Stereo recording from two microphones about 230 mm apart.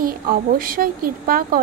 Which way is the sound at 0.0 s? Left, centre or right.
Right.